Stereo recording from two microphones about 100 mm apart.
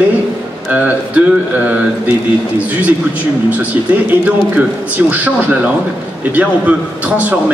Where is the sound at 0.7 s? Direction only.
15° right (ahead or behind).